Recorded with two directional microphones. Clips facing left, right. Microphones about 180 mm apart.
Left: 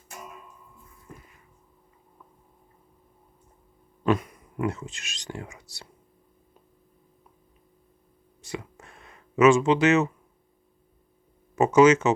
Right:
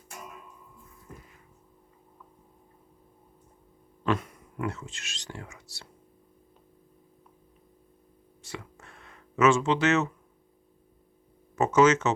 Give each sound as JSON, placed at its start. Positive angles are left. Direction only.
{"t": 4.0, "sound": "speech", "side_deg": 10}
{"t": 8.4, "sound": "a sound", "side_deg": 15}
{"t": 11.5, "sound": "speech", "side_deg": 10}